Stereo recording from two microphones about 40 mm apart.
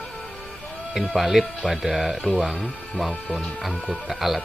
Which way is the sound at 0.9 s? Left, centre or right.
Centre.